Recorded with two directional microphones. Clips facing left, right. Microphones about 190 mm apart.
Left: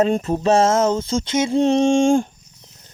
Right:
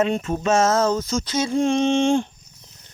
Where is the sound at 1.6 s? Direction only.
40° left (ahead or behind).